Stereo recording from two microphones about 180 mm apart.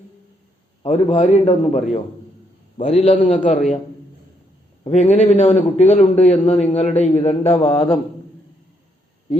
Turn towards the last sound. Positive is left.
turn(degrees=15)  # may be behind; listen again after turning